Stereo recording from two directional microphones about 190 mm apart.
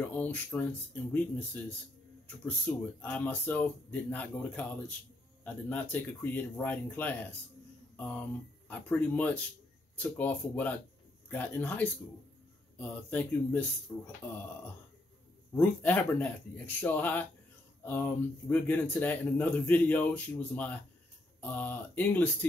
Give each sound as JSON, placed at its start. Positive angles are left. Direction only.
{"t": 0.1, "sound": "speech", "side_deg": 10}
{"t": 2.7, "sound": "speech", "side_deg": 10}
{"t": 15.5, "sound": "speech", "side_deg": 10}